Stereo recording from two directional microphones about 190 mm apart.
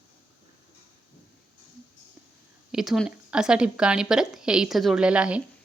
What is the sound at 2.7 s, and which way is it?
A woman's voice, centre (ahead or behind).